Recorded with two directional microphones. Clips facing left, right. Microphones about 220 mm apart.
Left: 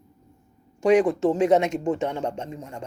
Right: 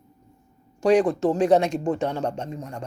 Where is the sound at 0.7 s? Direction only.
25° left (ahead or behind).